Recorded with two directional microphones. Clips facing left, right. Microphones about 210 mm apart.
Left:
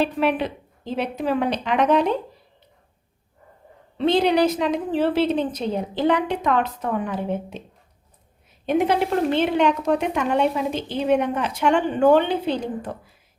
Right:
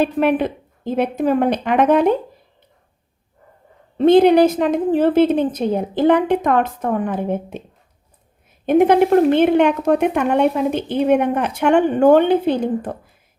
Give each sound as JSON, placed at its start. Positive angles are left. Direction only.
{"t": 0.0, "sound": "a woman's voice", "side_deg": -50}
{"t": 3.9, "sound": "a woman's voice", "side_deg": -50}
{"t": 8.6, "sound": "a woman's voice", "side_deg": -50}